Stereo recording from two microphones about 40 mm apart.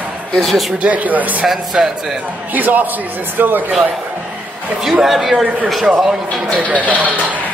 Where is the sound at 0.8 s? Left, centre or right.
Right.